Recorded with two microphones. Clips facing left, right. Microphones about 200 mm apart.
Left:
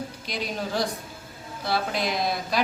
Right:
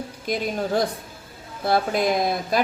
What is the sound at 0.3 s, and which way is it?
Speech, 50° right (ahead or behind).